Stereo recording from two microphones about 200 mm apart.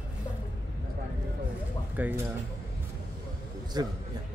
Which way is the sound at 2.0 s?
10° right (ahead or behind).